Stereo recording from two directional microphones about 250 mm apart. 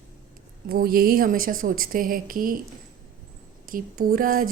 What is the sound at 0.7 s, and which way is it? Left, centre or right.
A woman's voice, right.